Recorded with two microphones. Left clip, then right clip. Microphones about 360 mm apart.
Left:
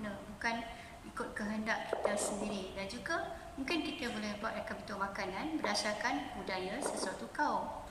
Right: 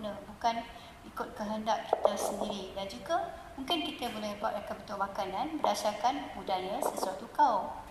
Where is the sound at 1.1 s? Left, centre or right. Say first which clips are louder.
Right 4 dB; centre.